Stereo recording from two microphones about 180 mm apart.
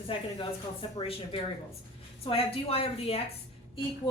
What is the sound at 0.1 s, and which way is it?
A woman's voice, 30° left (ahead or behind).